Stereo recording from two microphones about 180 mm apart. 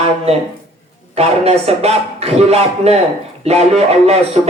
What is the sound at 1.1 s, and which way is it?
A man's voice, 35° right (ahead or behind).